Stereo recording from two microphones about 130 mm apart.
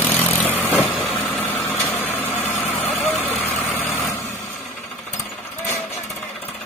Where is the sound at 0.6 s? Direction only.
5° right (ahead or behind).